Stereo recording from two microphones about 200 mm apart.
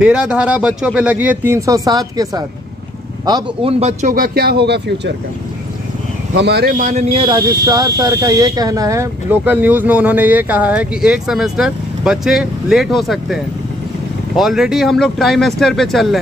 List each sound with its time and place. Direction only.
0.0 s speech: 5° right (ahead or behind); by 3.7 s 20° right (ahead or behind)
3.8 s speech: 40° right (ahead or behind); by 5.1 s 55° right (ahead or behind)
6.3 s speech: 55° right (ahead or behind); by 7.1 s 40° right (ahead or behind)
7.2 s speech: 20° right (ahead or behind); by 16.2 s centre (ahead or behind)